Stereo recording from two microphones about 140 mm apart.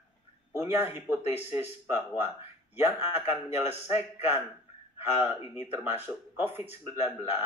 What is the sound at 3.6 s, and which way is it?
Speech, 50° left (ahead or behind).